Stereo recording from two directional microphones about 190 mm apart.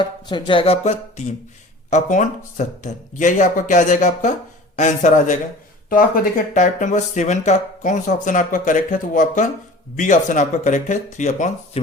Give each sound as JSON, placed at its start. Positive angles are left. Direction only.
{"t": 0.0, "sound": "speech", "side_deg": 25}